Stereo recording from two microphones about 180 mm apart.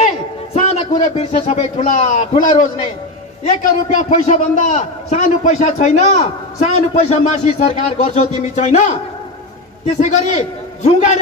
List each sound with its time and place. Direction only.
0.0 s a man's voice: 35° left (ahead or behind)